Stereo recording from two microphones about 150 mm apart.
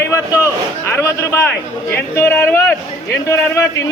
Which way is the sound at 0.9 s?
15° left (ahead or behind).